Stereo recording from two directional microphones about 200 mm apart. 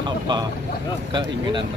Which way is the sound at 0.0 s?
20° right (ahead or behind).